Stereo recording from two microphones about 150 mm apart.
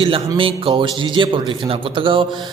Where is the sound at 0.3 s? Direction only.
35° right (ahead or behind).